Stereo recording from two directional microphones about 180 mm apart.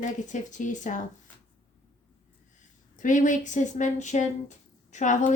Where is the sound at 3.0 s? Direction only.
45° left (ahead or behind).